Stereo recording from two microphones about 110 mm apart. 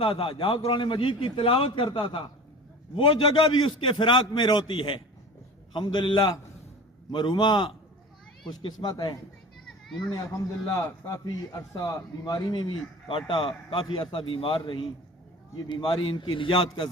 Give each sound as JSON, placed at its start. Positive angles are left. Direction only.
{"t": 0.0, "sound": "a man's voice", "side_deg": 50}
{"t": 9.6, "sound": "children playing", "side_deg": 0}
{"t": 10.8, "sound": "a man's voice", "side_deg": 30}
{"t": 12.2, "sound": "a man's voice", "side_deg": 40}